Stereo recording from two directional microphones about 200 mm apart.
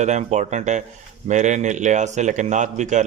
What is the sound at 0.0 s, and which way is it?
A man's voice, 35° right (ahead or behind).